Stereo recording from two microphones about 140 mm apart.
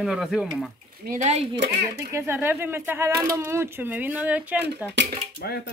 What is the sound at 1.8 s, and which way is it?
A woman's voice, 20° right (ahead or behind).